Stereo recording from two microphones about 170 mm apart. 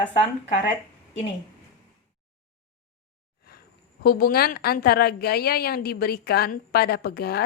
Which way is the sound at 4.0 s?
60° left (ahead or behind).